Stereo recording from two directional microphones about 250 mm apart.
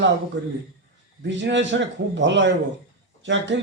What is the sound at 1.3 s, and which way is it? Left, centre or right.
A man's voice, right.